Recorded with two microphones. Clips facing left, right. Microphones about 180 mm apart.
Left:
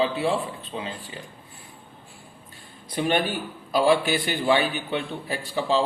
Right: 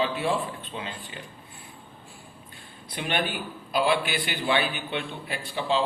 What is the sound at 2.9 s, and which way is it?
A man's voice, 40° left (ahead or behind).